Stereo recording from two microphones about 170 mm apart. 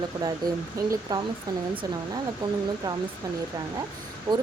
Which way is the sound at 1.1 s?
25° right (ahead or behind).